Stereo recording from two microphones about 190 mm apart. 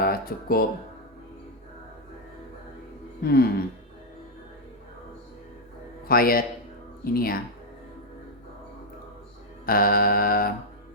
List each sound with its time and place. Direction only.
0.0 s speech: 50° left (ahead or behind)
3.2 s mantra: 55° left (ahead or behind)
6.1 s mantra: 50° left (ahead or behind)
9.6 s mantra: 50° left (ahead or behind)